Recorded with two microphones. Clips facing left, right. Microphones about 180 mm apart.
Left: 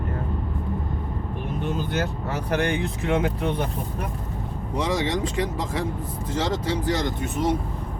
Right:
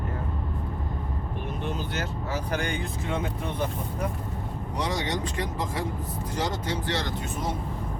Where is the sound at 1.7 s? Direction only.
60° left (ahead or behind); by 3.6 s 75° left (ahead or behind).